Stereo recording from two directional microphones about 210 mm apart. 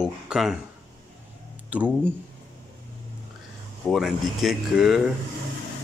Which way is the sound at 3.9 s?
Centre (ahead or behind).